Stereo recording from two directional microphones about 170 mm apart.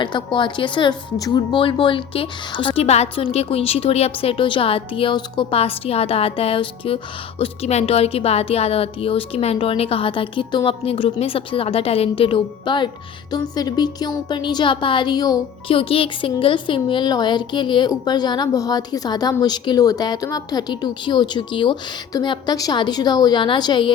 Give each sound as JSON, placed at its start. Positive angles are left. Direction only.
{"t": 0.0, "sound": "speech", "side_deg": 30}